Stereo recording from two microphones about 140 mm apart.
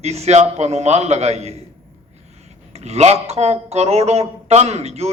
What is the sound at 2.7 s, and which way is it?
Speech, 50° right (ahead or behind).